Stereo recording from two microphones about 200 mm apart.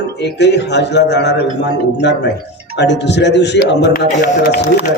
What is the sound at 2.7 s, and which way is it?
A man's voice, 60° left (ahead or behind).